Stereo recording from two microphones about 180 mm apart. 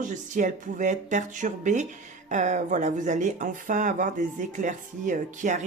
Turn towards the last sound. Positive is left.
turn(degrees=-45)  # may be behind; listen again after turning